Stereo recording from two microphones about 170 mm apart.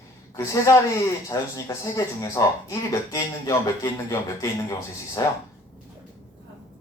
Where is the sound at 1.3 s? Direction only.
20° left (ahead or behind).